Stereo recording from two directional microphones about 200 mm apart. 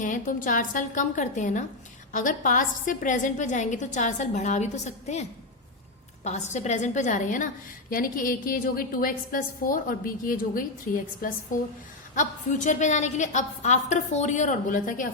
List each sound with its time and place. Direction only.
0.0 s a woman's voice: 40° left (ahead or behind)
6.2 s a woman's voice: 35° left (ahead or behind)